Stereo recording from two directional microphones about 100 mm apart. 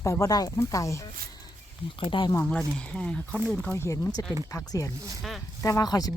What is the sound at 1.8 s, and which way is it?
Speech, 60° left (ahead or behind).